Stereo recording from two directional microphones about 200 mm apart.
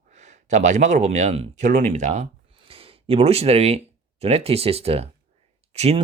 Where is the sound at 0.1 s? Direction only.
35° right (ahead or behind).